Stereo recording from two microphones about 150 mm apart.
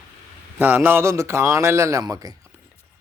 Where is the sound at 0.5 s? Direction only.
15° right (ahead or behind).